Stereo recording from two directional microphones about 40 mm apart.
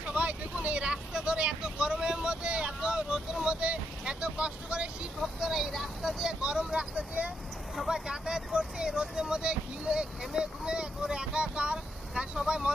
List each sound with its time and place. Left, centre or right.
0.0 s vehicle: right
0.8 s vehicle: right
5.2 s vehicle: centre
6.4 s vehicle: right
7.7 s vehicle: centre
8.1 s vehicle: centre